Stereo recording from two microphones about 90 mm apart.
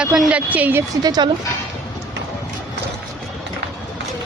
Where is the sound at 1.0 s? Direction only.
50° right (ahead or behind).